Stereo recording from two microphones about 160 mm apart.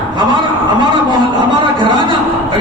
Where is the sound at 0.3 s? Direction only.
30° right (ahead or behind).